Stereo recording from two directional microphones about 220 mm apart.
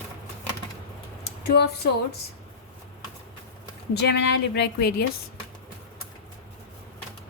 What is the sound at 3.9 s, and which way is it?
A woman's voice, 50° left (ahead or behind).